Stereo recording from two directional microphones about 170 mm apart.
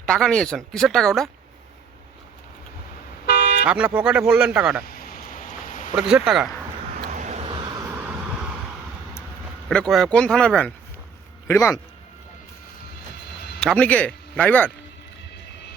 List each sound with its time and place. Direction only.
0.0 s speech: 5° left (ahead or behind)
3.2 s toot: 75° left (ahead or behind)
3.7 s speech: 10° right (ahead or behind)
4.9 s a sound: 55° left (ahead or behind)
6.0 s speech: 5° right (ahead or behind)
7.1 s vehicle: 45° right (ahead or behind)
9.6 s speech: 5° left (ahead or behind)
11.4 s a man's voice: 15° left (ahead or behind)
13.6 s speech: 5° left (ahead or behind)